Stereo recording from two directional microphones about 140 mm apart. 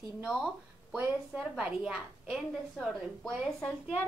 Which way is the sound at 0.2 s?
5° right (ahead or behind).